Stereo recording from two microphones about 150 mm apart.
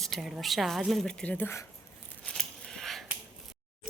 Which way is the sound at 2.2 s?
5° left (ahead or behind).